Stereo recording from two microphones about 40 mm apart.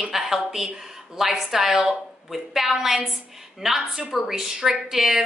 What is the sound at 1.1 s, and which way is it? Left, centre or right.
A woman's voice, centre.